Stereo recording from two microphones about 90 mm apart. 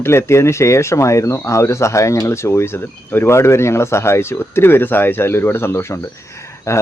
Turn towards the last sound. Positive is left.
turn(degrees=30)  # may be behind; listen again after turning